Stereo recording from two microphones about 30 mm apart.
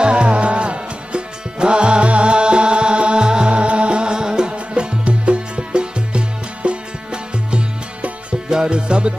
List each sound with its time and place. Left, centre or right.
0.0 s music: right